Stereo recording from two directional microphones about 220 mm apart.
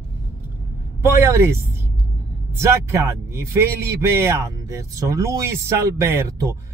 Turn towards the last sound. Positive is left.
turn(degrees=-15)  # may be behind; listen again after turning